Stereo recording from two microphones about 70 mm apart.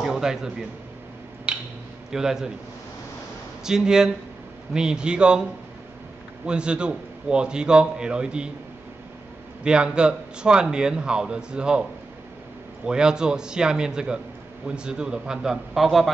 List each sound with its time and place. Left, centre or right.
0.0 s a man's voice: centre
1.5 s a sound: centre
2.0 s a man's voice: centre
3.6 s a man's voice: centre
6.4 s a man's voice: centre
9.6 s a man's voice: centre
12.8 s a man's voice: centre